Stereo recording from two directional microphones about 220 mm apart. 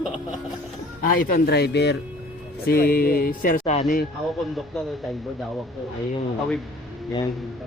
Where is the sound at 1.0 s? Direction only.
40° left (ahead or behind).